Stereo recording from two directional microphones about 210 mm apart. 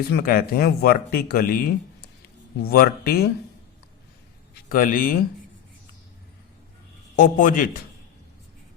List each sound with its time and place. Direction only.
0.1 s speech: 45° left (ahead or behind)
4.7 s speech: 40° left (ahead or behind)
7.2 s a man's voice: 40° left (ahead or behind)